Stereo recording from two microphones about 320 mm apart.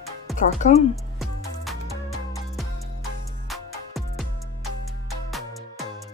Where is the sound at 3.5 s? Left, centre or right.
Centre.